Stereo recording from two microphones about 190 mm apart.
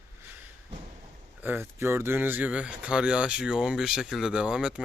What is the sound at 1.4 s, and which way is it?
Speech, 10° right (ahead or behind).